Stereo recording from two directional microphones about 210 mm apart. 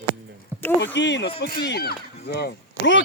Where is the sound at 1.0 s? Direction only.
55° left (ahead or behind).